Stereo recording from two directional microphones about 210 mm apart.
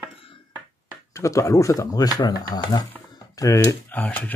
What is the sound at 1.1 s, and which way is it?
Speech, 15° left (ahead or behind).